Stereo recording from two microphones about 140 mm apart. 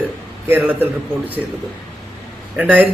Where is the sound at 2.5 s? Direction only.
10° right (ahead or behind).